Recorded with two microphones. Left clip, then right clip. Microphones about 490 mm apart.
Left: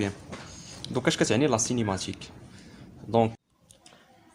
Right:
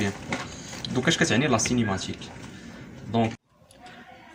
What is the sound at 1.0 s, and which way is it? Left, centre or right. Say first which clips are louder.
Speech: right 1 dB; left.